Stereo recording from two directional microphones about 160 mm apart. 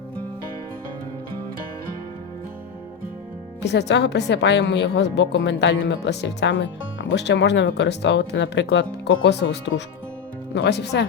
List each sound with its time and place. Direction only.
3.6 s a woman's voice: 90° left